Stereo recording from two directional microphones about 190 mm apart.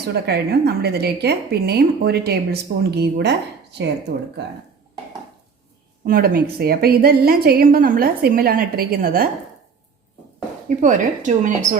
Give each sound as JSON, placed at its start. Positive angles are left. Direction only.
{"t": 0.1, "sound": "a woman's voice", "side_deg": -60}
{"t": 6.1, "sound": "a woman's voice", "side_deg": -50}
{"t": 10.8, "sound": "speech", "side_deg": -40}